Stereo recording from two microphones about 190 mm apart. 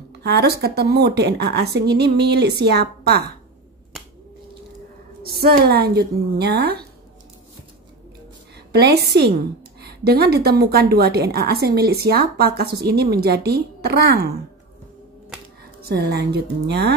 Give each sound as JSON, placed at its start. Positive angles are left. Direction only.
{"t": 0.1, "sound": "a woman's voice", "side_deg": -60}
{"t": 5.2, "sound": "a woman's voice", "side_deg": -55}
{"t": 8.7, "sound": "a woman's voice", "side_deg": -55}
{"t": 15.8, "sound": "a woman's voice", "side_deg": -55}